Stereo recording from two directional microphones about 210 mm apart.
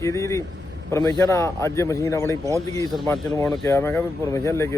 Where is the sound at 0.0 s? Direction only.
15° left (ahead or behind).